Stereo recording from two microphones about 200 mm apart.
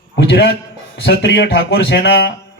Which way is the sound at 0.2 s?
55° left (ahead or behind).